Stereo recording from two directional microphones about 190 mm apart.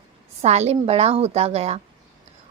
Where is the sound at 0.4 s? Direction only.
35° right (ahead or behind).